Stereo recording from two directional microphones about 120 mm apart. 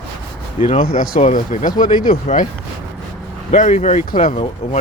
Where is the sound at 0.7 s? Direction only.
55° left (ahead or behind); by 1.8 s 90° left.